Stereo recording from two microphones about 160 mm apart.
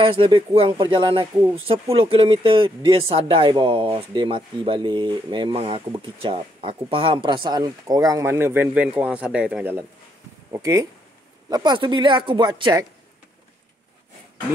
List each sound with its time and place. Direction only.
0.0 s speech: 35° right (ahead or behind)